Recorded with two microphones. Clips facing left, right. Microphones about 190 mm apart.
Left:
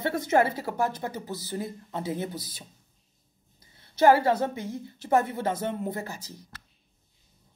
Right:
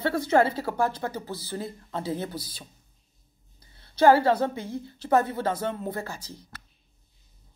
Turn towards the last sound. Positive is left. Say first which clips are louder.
# even
turn(degrees=20)  # may be behind; listen again after turning